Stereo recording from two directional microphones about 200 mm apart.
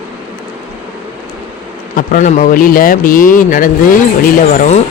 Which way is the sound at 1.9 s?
40° left (ahead or behind).